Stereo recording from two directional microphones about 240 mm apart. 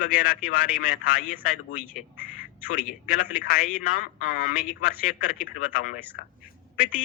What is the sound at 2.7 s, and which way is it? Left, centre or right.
Speech, left.